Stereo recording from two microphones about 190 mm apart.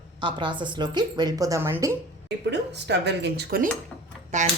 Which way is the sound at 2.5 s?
60° right (ahead or behind).